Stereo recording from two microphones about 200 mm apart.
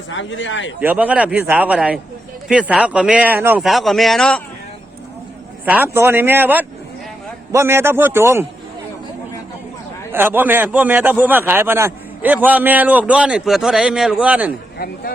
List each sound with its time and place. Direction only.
0.1 s speech: 70° left (ahead or behind)
0.8 s a man's voice: 10° right (ahead or behind)
5.6 s a man's voice: 10° right (ahead or behind)
10.1 s a man's voice: 10° right (ahead or behind)